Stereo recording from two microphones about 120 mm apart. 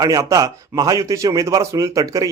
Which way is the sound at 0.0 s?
30° right (ahead or behind).